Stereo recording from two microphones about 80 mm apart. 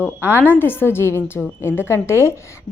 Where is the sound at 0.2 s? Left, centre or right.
Left.